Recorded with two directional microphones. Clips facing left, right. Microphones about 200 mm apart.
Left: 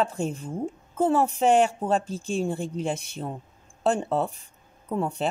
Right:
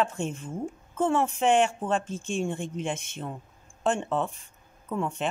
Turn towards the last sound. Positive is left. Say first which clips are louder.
# left 2 dB
turn(degrees=35)  # may be behind; listen again after turning